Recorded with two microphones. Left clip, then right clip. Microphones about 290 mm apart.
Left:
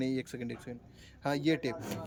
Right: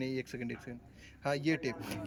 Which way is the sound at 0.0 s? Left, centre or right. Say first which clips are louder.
Left 2 dB; centre.